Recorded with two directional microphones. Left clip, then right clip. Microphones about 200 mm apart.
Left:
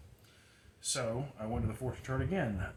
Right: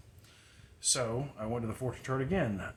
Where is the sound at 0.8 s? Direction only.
45° right (ahead or behind).